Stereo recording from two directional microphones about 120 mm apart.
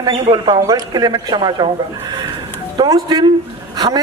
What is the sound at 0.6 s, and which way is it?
A man's voice, 30° right (ahead or behind).